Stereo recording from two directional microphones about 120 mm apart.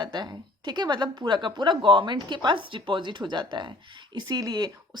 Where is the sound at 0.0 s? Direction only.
35° right (ahead or behind).